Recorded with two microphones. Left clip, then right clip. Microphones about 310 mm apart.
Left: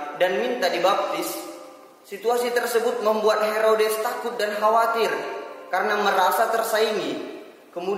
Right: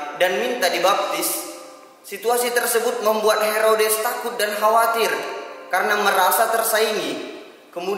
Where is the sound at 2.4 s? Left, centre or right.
Centre.